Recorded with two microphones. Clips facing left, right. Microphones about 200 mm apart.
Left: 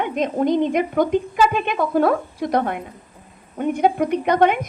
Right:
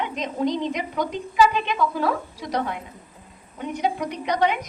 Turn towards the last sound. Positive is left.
turn(degrees=55)  # may be behind; listen again after turning